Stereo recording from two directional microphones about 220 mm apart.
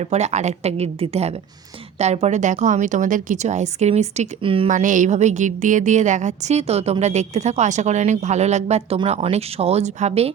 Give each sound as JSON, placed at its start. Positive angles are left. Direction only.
{"t": 0.0, "sound": "a woman's voice", "side_deg": -30}